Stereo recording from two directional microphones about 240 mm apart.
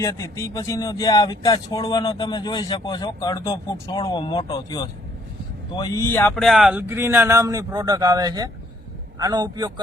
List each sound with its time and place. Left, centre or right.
0.0 s speech: centre